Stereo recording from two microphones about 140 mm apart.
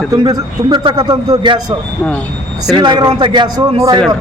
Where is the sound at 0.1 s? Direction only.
25° right (ahead or behind).